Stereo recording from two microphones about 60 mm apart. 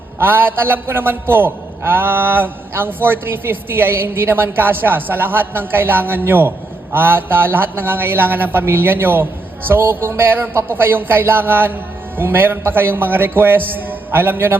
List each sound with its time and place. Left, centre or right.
0.2 s a man's voice: right